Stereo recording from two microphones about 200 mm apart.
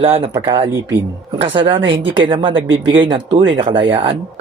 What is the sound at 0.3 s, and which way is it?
Speech, 20° right (ahead or behind).